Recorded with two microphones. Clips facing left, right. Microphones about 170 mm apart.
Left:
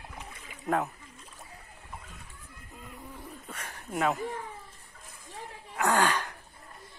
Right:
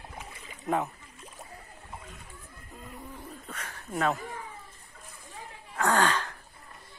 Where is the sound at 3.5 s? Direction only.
15° left (ahead or behind).